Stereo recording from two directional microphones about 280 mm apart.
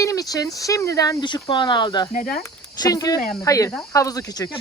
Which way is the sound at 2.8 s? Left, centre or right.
Centre.